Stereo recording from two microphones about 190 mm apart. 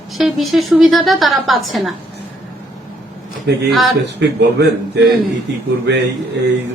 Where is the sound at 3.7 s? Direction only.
Centre (ahead or behind).